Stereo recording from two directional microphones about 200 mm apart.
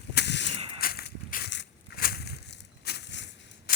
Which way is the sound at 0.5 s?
30° right (ahead or behind).